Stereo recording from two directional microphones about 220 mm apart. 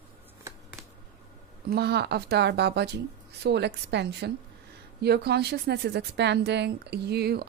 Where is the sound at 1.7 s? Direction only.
45° right (ahead or behind).